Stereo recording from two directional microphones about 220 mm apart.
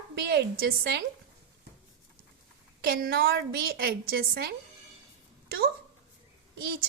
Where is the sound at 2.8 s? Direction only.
45° right (ahead or behind).